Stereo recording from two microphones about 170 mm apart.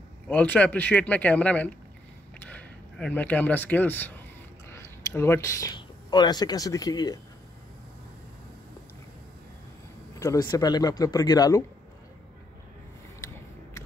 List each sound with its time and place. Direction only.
0.3 s speech: 10° left (ahead or behind)
10.1 s a sound: 20° left (ahead or behind)
10.5 s speech: 25° left (ahead or behind)